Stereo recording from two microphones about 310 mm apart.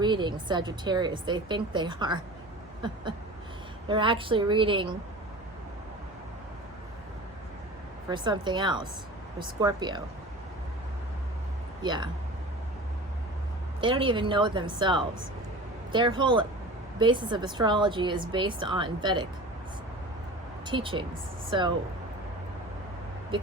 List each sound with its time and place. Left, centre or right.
0.0 s a woman's voice: centre
8.1 s a woman's voice: centre
11.8 s a woman's voice: centre
13.8 s a woman's voice: centre
20.7 s a woman's voice: centre